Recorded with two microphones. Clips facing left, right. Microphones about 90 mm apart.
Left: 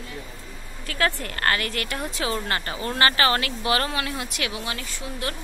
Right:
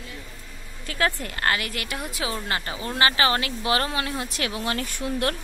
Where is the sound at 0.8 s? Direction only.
20° right (ahead or behind).